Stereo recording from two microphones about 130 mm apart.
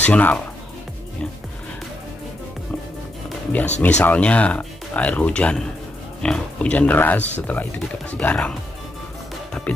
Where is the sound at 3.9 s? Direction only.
10° left (ahead or behind).